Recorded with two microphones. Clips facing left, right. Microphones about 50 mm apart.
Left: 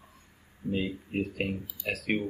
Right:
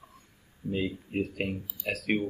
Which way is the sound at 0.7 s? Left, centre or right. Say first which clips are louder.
Even; centre.